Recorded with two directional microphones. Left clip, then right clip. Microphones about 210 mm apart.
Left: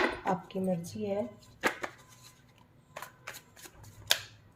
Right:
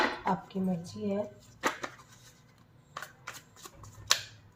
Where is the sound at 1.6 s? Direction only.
25° left (ahead or behind).